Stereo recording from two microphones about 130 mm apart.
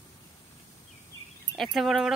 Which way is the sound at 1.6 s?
Centre (ahead or behind).